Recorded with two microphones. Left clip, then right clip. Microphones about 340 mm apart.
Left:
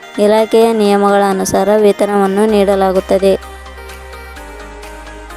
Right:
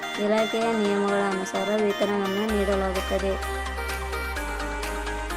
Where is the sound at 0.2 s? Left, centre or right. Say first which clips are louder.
Left 15 dB; left.